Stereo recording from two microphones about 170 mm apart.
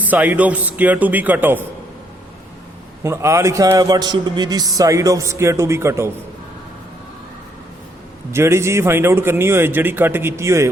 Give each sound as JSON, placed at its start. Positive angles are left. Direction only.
{"t": 0.0, "sound": "a man's voice", "side_deg": -10}
{"t": 3.0, "sound": "a man's voice", "side_deg": -15}
{"t": 8.3, "sound": "a man's voice", "side_deg": -15}